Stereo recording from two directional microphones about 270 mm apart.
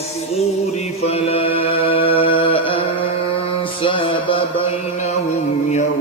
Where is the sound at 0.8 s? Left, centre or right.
Left.